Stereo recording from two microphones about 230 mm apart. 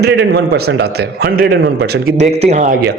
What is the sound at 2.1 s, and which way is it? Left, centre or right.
Speech, right.